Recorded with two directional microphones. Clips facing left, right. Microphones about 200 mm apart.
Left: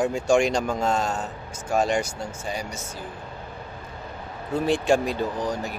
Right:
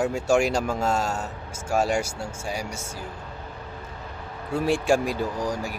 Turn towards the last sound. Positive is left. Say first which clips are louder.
# left 1 dB
turn(degrees=-10)  # may be behind; listen again after turning